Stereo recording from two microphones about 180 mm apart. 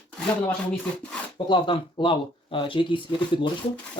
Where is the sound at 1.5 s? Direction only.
25° left (ahead or behind).